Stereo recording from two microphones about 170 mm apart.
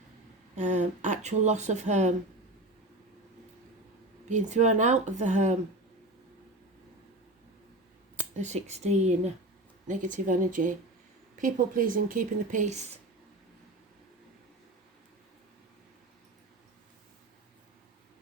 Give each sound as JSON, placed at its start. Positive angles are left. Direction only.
{"t": 0.5, "sound": "speech", "side_deg": -45}
{"t": 4.3, "sound": "speech", "side_deg": -45}
{"t": 8.1, "sound": "speech", "side_deg": -45}